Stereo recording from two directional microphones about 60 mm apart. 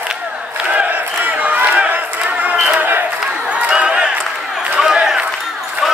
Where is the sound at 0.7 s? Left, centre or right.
Right.